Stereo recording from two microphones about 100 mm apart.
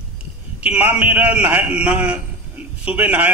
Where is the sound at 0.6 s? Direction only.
15° right (ahead or behind).